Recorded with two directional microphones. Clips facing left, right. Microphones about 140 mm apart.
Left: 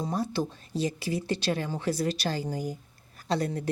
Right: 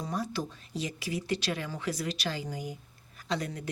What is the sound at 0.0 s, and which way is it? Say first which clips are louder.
Speech: left 4 dB; 30° left (ahead or behind).